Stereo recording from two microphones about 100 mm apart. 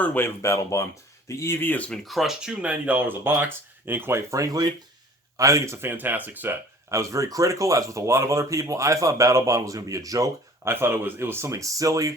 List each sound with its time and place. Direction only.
0.0 s speech: 15° left (ahead or behind)
0.4 s speech: 30° left (ahead or behind)
1.9 s speech: centre (ahead or behind); by 6.6 s 20° right (ahead or behind)
6.9 s speech: 30° right (ahead or behind)
10.6 s speech: 25° right (ahead or behind)